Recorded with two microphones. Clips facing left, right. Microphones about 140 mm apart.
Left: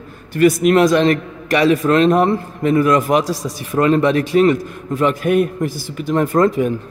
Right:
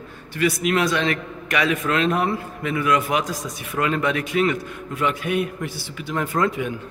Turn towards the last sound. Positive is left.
turn(degrees=40)  # may be behind; listen again after turning